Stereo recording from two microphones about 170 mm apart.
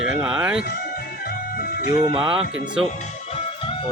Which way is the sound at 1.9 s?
25° right (ahead or behind).